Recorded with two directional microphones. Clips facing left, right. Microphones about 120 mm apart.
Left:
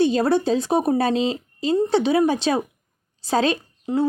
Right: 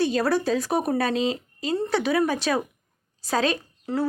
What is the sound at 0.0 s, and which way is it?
Speech, 25° left (ahead or behind).